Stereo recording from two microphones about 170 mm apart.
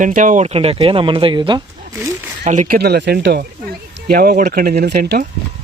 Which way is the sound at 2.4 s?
50° right (ahead or behind).